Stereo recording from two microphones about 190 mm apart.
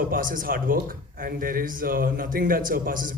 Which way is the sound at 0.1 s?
45° right (ahead or behind).